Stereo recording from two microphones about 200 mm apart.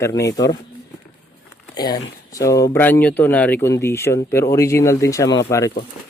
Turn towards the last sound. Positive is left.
turn(degrees=15)  # may be behind; listen again after turning